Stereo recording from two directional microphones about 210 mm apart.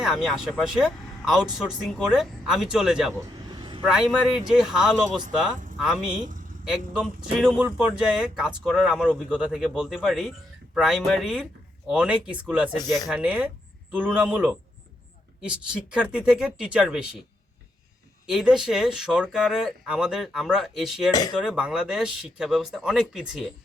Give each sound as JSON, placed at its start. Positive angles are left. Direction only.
{"t": 0.0, "sound": "speech", "side_deg": 0}
{"t": 3.2, "sound": "vehicle", "side_deg": -20}
{"t": 3.8, "sound": "a man's voice", "side_deg": -5}
{"t": 18.3, "sound": "speech", "side_deg": -5}
{"t": 21.1, "sound": "speech", "side_deg": 20}
{"t": 21.3, "sound": "speech", "side_deg": -5}